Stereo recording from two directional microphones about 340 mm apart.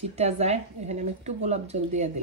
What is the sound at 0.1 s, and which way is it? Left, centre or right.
Speech, centre.